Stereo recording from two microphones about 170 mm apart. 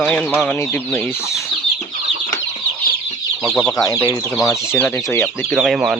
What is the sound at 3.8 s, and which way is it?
Speech, 20° left (ahead or behind).